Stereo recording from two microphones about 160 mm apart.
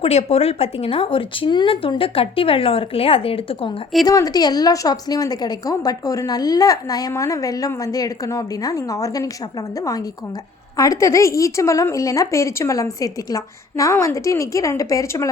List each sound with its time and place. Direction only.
0.0 s speech: 40° left (ahead or behind)
4.0 s a woman's voice: 20° left (ahead or behind)